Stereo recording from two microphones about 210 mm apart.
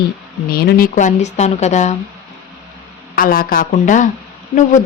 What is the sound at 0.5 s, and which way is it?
A woman's voice, 50° left (ahead or behind).